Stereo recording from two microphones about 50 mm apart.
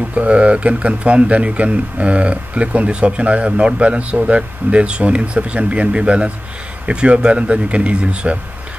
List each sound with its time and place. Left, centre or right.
0.1 s speech: right